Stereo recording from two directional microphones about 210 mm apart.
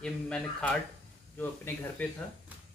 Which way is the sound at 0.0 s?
5° left (ahead or behind).